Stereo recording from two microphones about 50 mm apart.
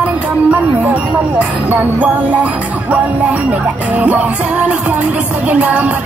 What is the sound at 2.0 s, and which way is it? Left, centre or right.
Music, right.